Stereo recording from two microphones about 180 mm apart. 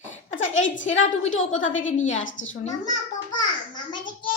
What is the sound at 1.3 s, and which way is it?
A woman's voice, 90° left.